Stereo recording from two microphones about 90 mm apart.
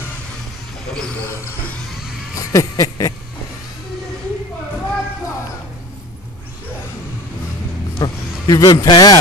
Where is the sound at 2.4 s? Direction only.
40° left (ahead or behind).